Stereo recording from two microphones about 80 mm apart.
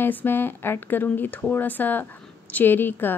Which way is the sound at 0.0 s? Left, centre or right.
Left.